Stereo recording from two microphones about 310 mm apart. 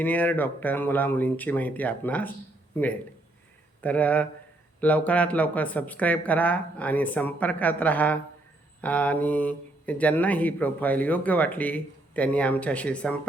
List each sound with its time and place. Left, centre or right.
0.0 s a man's voice: centre